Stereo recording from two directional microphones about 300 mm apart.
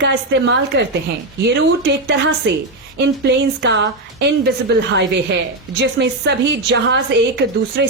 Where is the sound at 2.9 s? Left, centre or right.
Right.